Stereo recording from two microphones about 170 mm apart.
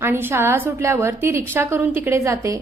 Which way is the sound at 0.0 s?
10° right (ahead or behind).